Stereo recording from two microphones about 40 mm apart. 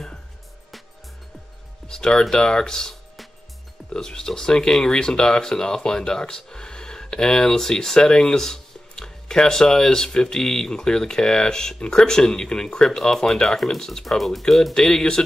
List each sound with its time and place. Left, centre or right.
1.9 s speech: centre
14.0 s speech: centre